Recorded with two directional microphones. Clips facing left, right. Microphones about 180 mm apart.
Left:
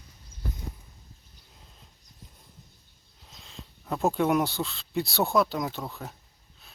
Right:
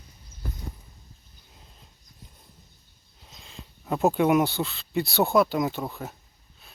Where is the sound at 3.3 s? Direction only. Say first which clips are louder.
Right 1 dB; centre (ahead or behind).